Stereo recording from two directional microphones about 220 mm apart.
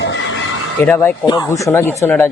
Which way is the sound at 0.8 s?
10° left (ahead or behind).